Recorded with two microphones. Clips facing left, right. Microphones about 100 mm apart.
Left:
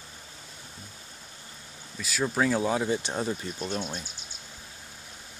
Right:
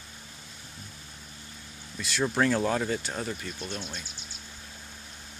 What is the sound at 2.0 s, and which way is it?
Speech, centre (ahead or behind).